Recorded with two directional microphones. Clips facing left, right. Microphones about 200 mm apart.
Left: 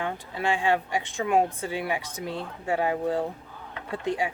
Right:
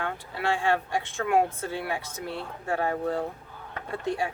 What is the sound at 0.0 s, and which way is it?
Speech, 15° left (ahead or behind).